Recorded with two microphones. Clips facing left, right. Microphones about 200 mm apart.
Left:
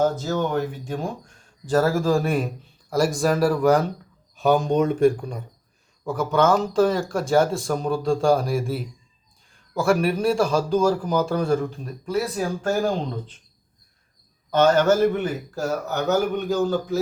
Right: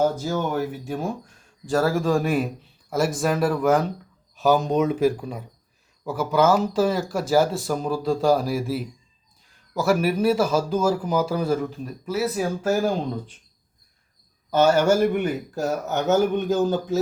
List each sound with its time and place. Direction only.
0.0 s a man's voice: 10° right (ahead or behind)
14.5 s speech: 10° right (ahead or behind)